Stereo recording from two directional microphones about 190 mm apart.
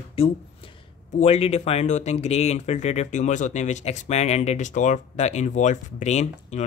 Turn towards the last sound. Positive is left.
turn(degrees=35)  # may be behind; listen again after turning